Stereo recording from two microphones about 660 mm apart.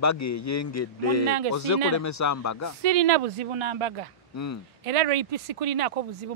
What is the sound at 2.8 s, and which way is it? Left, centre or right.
Speech, right.